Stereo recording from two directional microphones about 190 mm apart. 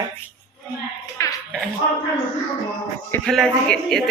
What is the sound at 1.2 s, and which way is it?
Music, 15° left (ahead or behind).